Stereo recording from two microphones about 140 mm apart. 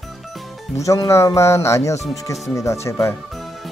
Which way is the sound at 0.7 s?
20° left (ahead or behind).